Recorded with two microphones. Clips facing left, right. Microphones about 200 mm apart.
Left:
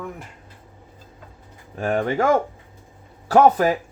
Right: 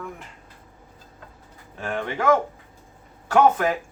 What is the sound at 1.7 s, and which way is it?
Speech, 45° left (ahead or behind).